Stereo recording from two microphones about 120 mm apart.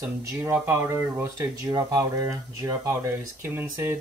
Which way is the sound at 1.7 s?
35° right (ahead or behind).